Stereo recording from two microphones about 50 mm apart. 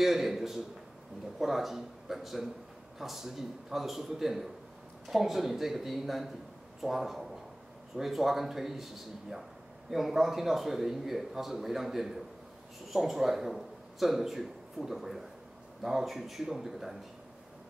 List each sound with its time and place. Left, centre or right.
0.0 s a man's voice: centre